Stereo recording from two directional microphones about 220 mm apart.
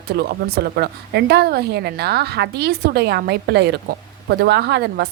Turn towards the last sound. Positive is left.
turn(degrees=-50)  # may be behind; listen again after turning